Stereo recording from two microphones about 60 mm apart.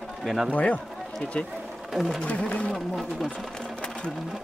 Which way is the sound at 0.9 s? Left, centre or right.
Centre.